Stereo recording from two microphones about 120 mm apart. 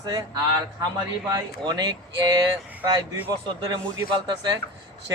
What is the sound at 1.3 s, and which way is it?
Speech, 35° right (ahead or behind).